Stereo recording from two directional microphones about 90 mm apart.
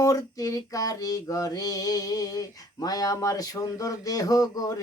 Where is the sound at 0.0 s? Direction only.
40° left (ahead or behind).